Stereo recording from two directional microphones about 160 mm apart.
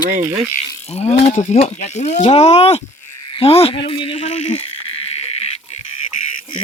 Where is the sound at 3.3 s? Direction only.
35° left (ahead or behind).